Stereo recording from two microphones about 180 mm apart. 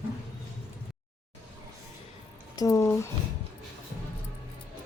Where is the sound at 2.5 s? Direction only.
20° left (ahead or behind).